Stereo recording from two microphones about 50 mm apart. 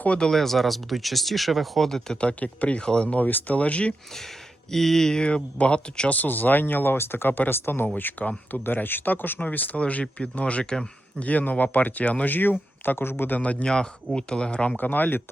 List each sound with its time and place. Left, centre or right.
0.2 s speech: centre
2.2 s speech: left
3.2 s speech: left
4.7 s speech: centre
5.2 s speech: left
6.1 s speech: left
6.9 s speech: left
8.2 s speech: left; by 10.8 s centre
11.2 s speech: left
13.7 s speech: centre
14.8 s speech: left